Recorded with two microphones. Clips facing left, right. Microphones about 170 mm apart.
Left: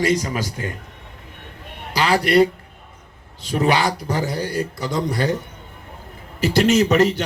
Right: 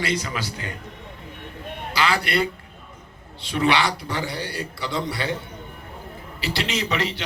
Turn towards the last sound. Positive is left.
turn(degrees=45)  # may be behind; listen again after turning